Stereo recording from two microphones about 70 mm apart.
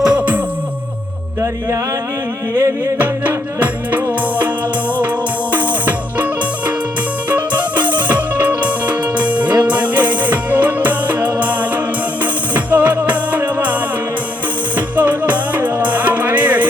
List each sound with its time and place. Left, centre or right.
0.0 s a sound: centre
2.6 s music: right
3.0 s music: right
5.5 s music: right
7.3 s music: right
14.8 s music: right